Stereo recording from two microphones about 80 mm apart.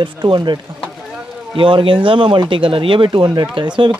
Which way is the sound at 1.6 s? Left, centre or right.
Right.